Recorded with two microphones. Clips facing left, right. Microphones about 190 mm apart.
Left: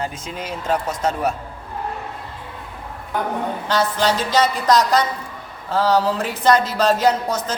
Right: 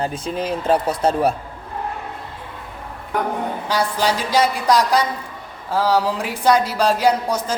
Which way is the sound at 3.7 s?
10° right (ahead or behind).